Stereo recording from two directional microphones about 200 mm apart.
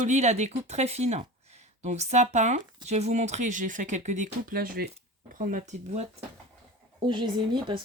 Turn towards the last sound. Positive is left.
turn(degrees=-25)  # may be behind; listen again after turning